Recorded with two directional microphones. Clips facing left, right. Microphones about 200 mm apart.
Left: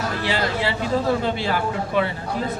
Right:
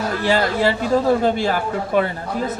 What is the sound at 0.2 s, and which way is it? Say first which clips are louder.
A man's voice: right 7 dB; 45° right (ahead or behind).